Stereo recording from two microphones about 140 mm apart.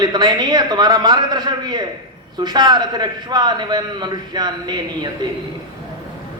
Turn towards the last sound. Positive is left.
turn(degrees=-30)  # may be behind; listen again after turning